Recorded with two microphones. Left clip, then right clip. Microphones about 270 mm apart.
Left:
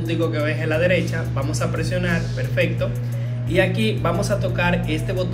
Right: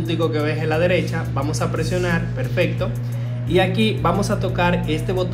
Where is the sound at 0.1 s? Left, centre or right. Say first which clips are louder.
Right 1 dB; centre.